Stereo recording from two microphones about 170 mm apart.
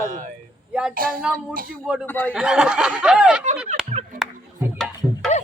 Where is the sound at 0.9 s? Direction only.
55° right (ahead or behind).